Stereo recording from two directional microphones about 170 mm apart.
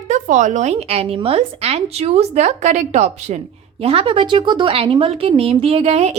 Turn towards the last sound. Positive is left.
turn(degrees=-40)  # may be behind; listen again after turning